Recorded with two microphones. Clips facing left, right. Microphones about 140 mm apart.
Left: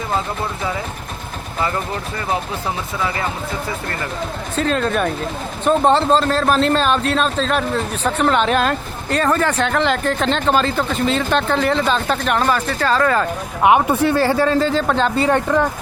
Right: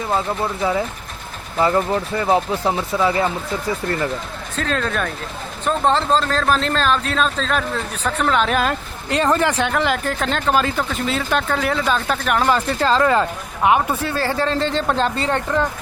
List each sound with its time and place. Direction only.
4.5 s speech: 5° left (ahead or behind)
9.0 s speech: 15° right (ahead or behind)
12.5 s speech: 25° right (ahead or behind)
13.7 s speech: 15° left (ahead or behind); by 15.2 s centre (ahead or behind)
15.2 s speech: 10° left (ahead or behind)